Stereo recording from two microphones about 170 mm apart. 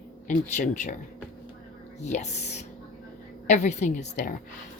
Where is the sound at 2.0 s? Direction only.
40° left (ahead or behind).